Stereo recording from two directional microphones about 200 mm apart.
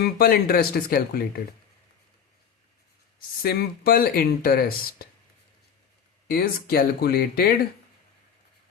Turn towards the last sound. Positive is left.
turn(degrees=50)  # may be behind; listen again after turning